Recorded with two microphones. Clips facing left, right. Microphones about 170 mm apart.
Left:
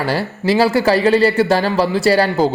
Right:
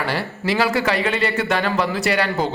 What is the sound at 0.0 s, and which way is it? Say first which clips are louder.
Speech: left 5 dB; 35° left (ahead or behind).